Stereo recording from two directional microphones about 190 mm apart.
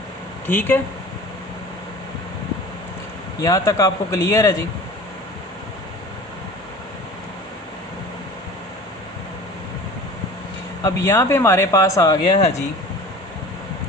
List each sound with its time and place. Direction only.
0.4 s speech: 10° left (ahead or behind)
3.4 s speech: 20° left (ahead or behind)
10.8 s speech: 15° left (ahead or behind)
12.4 s speech: 35° left (ahead or behind)